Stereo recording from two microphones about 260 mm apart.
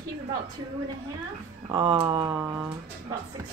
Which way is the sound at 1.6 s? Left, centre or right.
Centre.